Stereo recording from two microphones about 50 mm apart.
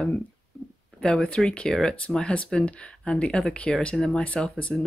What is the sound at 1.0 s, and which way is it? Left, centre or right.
Speech, centre.